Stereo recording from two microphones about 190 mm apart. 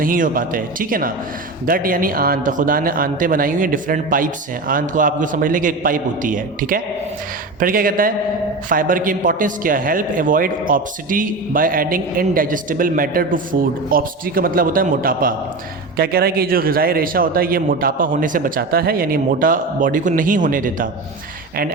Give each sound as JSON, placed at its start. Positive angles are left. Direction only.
{"t": 0.0, "sound": "a man's voice", "side_deg": -45}